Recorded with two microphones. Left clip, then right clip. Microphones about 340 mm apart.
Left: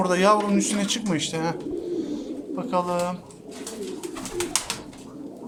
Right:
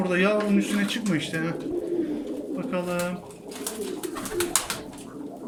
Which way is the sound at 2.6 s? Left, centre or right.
Centre.